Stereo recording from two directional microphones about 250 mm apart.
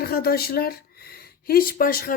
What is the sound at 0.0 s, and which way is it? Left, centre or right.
A woman's voice, left.